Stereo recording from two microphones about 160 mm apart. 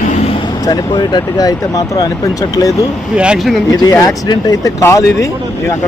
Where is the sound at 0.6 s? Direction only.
25° left (ahead or behind).